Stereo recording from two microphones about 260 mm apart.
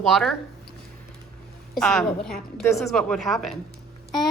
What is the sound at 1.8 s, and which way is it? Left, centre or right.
Speech, centre.